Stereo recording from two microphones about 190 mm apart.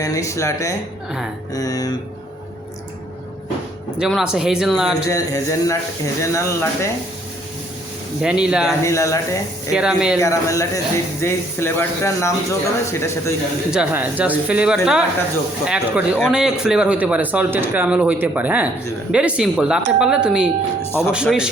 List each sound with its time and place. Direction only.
0.0 s speech: 15° left (ahead or behind)
1.5 s mantra: 20° left (ahead or behind)
3.9 s speech: 5° right (ahead or behind)
5.0 s speech: 15° left (ahead or behind)
8.2 s speech: 5° right (ahead or behind)
8.8 s speech: 15° left (ahead or behind)
9.7 s speech: 5° right (ahead or behind)
10.2 s speech: 15° left (ahead or behind)
13.7 s a man's voice: 5° right (ahead or behind)